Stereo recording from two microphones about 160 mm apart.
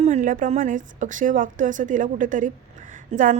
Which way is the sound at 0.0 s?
50° right (ahead or behind).